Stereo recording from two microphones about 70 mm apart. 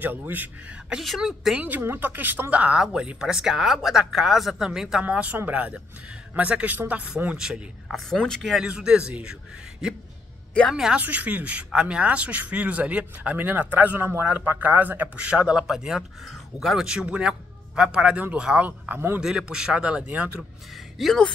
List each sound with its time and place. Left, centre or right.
0.0 s a man's voice: right
1.0 s a woman's voice: centre
1.6 s a man's voice: right; by 5.0 s centre
5.0 s a man's voice: right
7.9 s speech: centre
8.4 s a woman's voice: centre
11.0 s a man's voice: right
18.7 s a man's voice: right
19.1 s speech: centre
21.0 s a woman's voice: centre